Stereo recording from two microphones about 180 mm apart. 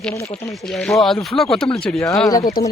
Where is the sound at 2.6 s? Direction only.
55° left (ahead or behind).